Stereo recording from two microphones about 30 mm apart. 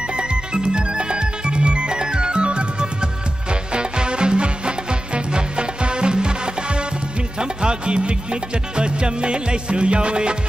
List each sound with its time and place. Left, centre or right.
0.1 s music: right